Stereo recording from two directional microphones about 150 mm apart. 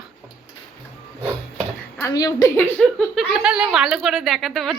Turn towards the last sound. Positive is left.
turn(degrees=0)  # may be behind; listen again after turning